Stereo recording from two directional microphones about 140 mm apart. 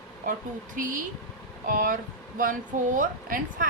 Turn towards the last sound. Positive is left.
turn(degrees=-70)  # may be behind; listen again after turning